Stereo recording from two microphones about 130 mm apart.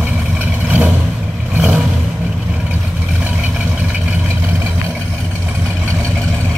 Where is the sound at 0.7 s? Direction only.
10° right (ahead or behind).